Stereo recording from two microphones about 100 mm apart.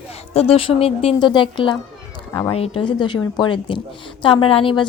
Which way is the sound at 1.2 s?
55° left (ahead or behind).